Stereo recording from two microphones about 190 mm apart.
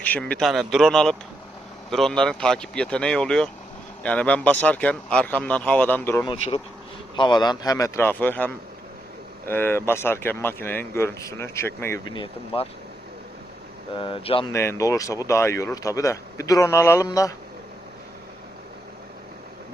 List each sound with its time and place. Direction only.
0.0 s speech: 10° left (ahead or behind)
7.2 s speech: 25° left (ahead or behind)
12.1 s speech: 25° left (ahead or behind)
14.0 s speech: 30° left (ahead or behind)
14.5 s speech: 15° left (ahead or behind)